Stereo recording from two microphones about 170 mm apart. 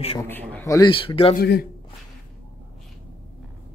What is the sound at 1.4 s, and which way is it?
Speech, 70° left (ahead or behind).